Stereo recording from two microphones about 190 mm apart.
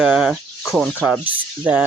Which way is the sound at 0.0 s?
Centre (ahead or behind).